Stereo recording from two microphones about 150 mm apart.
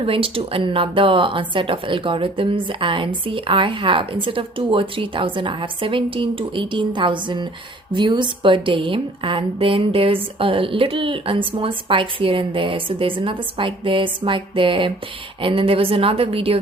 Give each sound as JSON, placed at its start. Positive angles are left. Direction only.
{"t": 0.0, "sound": "a woman's voice", "side_deg": -40}